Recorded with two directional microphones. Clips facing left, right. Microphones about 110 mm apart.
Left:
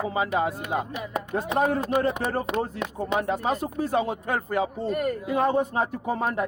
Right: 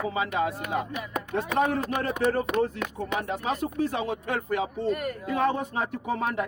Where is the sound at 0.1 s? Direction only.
35° left (ahead or behind).